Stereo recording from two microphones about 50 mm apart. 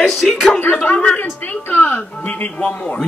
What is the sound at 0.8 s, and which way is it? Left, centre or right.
Speech, left.